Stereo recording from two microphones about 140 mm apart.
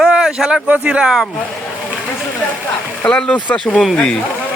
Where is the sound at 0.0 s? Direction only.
5° right (ahead or behind).